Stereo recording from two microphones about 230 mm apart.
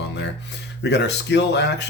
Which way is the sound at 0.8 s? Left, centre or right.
Left.